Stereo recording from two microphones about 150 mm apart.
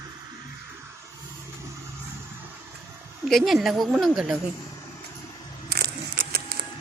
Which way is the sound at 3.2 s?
Centre (ahead or behind).